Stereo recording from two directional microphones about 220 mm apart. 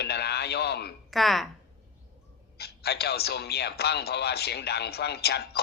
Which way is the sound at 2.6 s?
45° left (ahead or behind).